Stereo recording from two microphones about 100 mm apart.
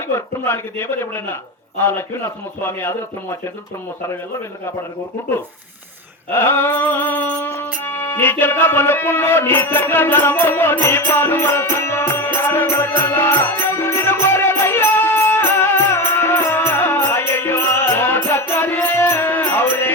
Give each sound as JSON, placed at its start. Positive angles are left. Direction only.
{"t": 0.1, "sound": "a man's voice", "side_deg": 25}
{"t": 6.3, "sound": "a man's voice", "side_deg": 25}
{"t": 7.6, "sound": "music", "side_deg": 20}